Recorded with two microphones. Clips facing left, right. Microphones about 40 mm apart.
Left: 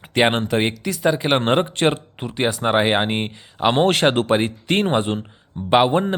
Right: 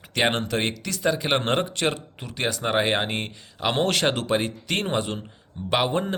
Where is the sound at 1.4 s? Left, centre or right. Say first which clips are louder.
Left 6 dB; left.